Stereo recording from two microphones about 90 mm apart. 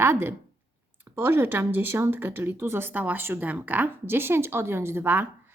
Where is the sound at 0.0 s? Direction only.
25° right (ahead or behind).